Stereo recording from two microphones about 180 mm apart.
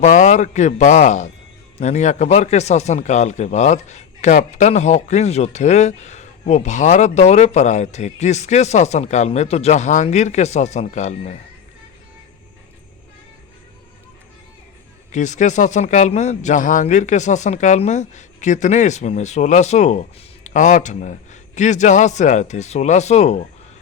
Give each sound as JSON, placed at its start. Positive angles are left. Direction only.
{"t": 0.0, "sound": "a man's voice", "side_deg": 40}
{"t": 15.1, "sound": "a man's voice", "side_deg": 40}